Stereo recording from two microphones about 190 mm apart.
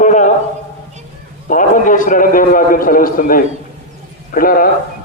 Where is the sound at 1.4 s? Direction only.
45° left (ahead or behind).